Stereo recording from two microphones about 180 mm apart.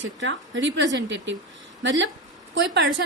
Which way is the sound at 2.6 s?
75° right (ahead or behind).